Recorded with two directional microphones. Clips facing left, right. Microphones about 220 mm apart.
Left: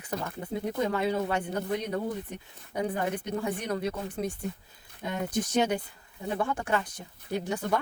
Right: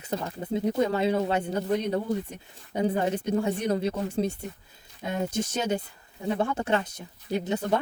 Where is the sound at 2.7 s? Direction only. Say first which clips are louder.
Right 4 dB; 25° right (ahead or behind).